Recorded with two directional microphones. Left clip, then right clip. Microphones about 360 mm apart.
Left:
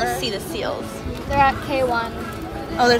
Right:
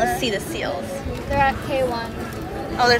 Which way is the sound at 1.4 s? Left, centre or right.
Left.